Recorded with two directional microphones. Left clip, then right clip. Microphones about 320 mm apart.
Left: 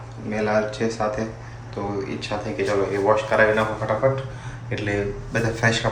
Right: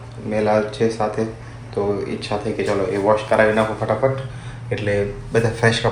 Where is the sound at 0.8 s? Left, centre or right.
Centre.